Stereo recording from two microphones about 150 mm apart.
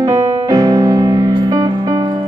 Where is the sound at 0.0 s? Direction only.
25° right (ahead or behind).